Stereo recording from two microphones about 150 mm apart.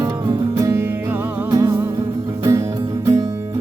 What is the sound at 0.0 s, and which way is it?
Music, 25° right (ahead or behind).